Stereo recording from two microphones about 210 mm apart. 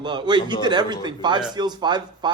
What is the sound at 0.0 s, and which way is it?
Speech, 20° right (ahead or behind).